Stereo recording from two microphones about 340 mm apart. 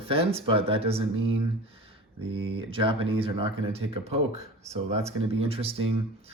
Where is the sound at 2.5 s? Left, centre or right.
Centre.